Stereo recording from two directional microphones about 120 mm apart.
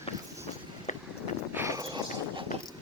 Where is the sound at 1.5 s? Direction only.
25° right (ahead or behind).